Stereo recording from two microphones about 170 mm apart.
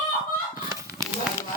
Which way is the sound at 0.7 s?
20° right (ahead or behind).